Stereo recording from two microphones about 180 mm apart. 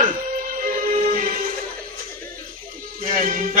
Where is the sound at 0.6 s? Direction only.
50° right (ahead or behind).